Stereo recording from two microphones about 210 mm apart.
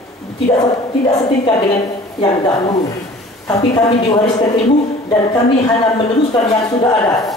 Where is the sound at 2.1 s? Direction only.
25° left (ahead or behind).